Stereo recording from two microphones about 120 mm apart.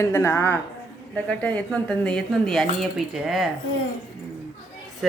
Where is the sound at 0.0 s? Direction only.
20° left (ahead or behind); by 3.5 s 5° right (ahead or behind).